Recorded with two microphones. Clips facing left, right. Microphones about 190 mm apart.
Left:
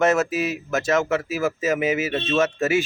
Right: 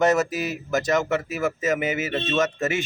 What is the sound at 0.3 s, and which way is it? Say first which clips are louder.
Speech: left 3 dB; 25° left (ahead or behind).